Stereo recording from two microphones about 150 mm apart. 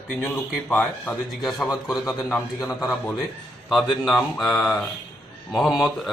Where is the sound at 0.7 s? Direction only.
5° left (ahead or behind).